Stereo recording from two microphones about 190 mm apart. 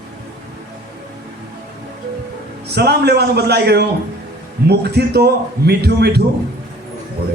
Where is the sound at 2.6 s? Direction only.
60° right (ahead or behind).